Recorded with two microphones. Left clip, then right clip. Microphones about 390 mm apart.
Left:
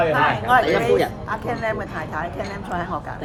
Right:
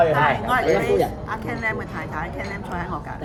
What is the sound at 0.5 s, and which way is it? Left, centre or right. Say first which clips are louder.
A woman's voice: left 3 dB; centre.